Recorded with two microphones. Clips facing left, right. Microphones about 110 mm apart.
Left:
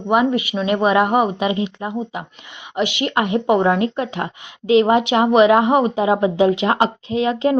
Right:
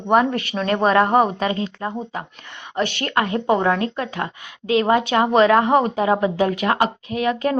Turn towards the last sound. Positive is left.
turn(degrees=25)  # may be behind; listen again after turning